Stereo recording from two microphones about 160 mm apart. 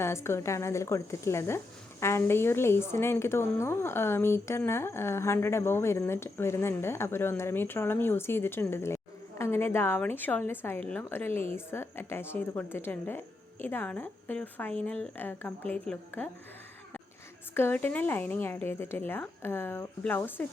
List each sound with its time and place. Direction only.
0.0 s speech: 15° left (ahead or behind)
17.5 s speech: 15° left (ahead or behind)